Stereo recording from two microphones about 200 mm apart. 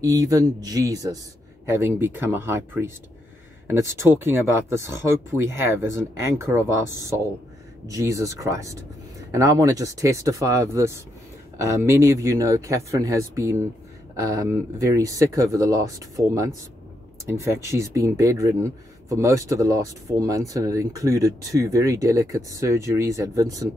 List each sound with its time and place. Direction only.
0.0 s speech: 15° right (ahead or behind)
7.8 s speech: 15° right (ahead or behind)